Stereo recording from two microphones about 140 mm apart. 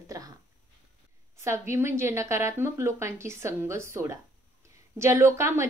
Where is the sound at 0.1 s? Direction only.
25° right (ahead or behind).